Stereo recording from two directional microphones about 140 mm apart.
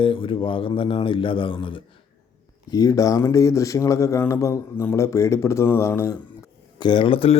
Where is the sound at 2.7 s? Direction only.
25° left (ahead or behind).